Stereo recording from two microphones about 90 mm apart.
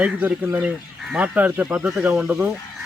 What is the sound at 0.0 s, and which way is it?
Speech, 15° right (ahead or behind).